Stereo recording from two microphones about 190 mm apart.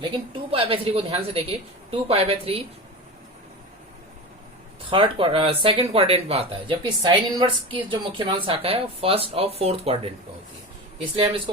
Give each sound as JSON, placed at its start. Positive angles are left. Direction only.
{"t": 0.0, "sound": "speech", "side_deg": -25}
{"t": 4.9, "sound": "speech", "side_deg": -25}
{"t": 11.2, "sound": "speech", "side_deg": -25}